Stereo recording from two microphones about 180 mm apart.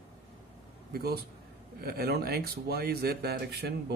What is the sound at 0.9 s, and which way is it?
Speech, 60° right (ahead or behind).